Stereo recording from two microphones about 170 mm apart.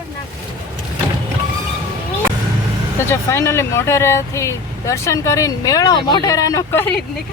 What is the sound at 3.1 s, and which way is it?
Speech, 15° left (ahead or behind).